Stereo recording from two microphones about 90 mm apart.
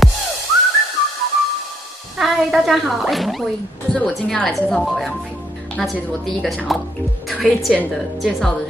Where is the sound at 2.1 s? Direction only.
Centre (ahead or behind).